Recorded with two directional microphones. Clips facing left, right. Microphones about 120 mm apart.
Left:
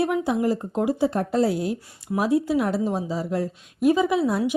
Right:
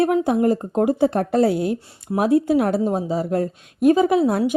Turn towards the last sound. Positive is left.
turn(degrees=-50)  # may be behind; listen again after turning